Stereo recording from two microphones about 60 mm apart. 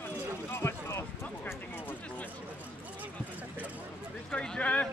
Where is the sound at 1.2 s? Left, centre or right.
Left.